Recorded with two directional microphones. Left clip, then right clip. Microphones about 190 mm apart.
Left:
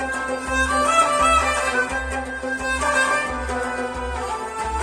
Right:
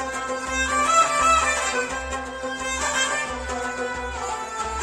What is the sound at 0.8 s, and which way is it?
Music, 25° right (ahead or behind).